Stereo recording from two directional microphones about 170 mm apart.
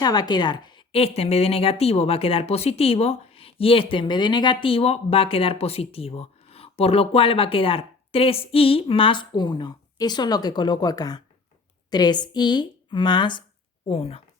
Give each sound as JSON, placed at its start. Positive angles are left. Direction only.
{"t": 0.0, "sound": "a woman's voice", "side_deg": 25}